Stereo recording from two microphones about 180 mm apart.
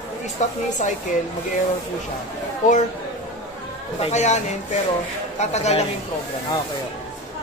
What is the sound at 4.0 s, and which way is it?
Speech, 40° left (ahead or behind).